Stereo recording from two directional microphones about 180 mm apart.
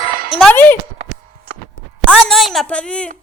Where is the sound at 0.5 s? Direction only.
10° left (ahead or behind).